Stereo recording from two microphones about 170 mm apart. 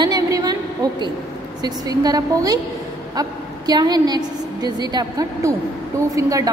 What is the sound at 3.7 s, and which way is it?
A woman's voice, 25° right (ahead or behind).